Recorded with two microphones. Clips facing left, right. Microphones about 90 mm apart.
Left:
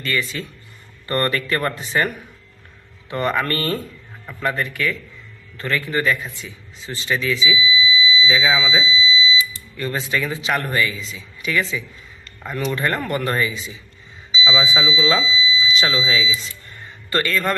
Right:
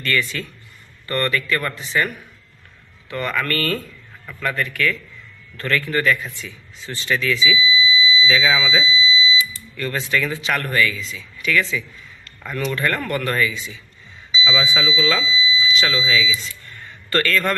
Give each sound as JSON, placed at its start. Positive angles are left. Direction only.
{"t": 0.0, "sound": "speech", "side_deg": 10}
{"t": 1.0, "sound": "speech", "side_deg": 30}
{"t": 17.1, "sound": "speech", "side_deg": 15}